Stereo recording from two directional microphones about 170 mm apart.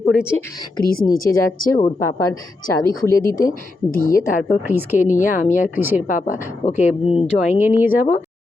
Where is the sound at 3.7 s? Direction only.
55° left (ahead or behind).